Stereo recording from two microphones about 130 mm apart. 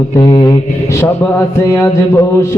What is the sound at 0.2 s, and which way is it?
Speech, 35° left (ahead or behind).